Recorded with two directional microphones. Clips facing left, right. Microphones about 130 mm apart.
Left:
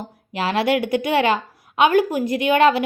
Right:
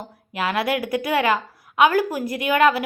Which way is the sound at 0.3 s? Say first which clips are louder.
Left 3 dB; 25° left (ahead or behind).